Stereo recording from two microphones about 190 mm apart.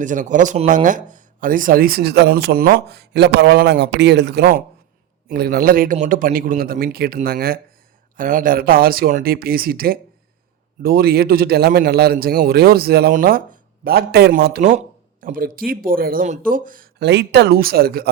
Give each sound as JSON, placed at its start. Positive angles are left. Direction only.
{"t": 0.0, "sound": "speech", "side_deg": -40}